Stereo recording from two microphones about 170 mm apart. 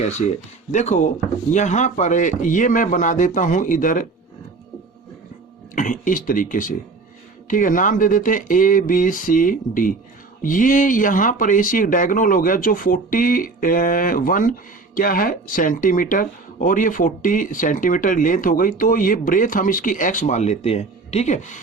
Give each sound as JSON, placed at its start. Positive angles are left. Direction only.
{"t": 0.0, "sound": "speech", "side_deg": 40}
{"t": 5.7, "sound": "speech", "side_deg": 50}